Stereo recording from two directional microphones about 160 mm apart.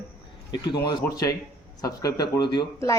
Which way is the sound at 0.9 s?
25° left (ahead or behind).